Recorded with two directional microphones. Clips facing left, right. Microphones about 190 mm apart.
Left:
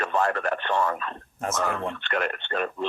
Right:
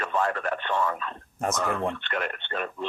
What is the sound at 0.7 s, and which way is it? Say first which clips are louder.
Speech: left 2 dB; 40° left (ahead or behind).